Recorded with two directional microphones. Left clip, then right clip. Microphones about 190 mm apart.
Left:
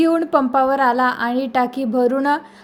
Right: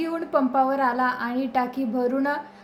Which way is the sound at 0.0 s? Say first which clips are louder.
Left 8 dB; 45° left (ahead or behind).